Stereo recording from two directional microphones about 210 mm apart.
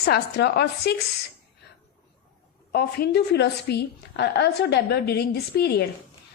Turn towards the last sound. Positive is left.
turn(degrees=50)  # may be behind; listen again after turning